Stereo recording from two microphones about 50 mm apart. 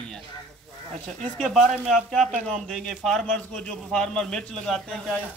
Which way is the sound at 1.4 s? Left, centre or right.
Centre.